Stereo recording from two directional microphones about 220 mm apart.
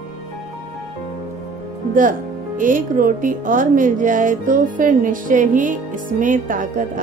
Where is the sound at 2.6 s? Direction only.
40° right (ahead or behind).